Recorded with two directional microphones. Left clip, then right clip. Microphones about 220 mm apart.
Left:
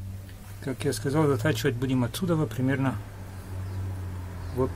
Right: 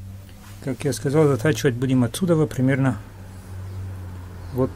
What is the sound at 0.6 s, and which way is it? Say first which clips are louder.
Speech: right 4 dB; 35° right (ahead or behind).